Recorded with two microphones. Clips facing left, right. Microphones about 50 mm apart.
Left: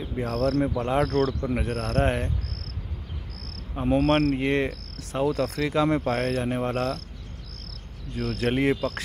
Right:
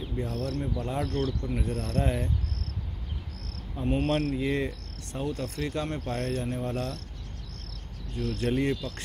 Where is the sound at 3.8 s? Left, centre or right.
Left.